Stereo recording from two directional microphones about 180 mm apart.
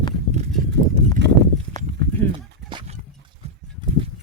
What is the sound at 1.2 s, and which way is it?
Horse, 75° right (ahead or behind).